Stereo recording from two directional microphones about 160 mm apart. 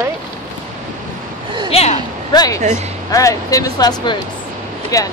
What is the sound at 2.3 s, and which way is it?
Speech, 25° left (ahead or behind).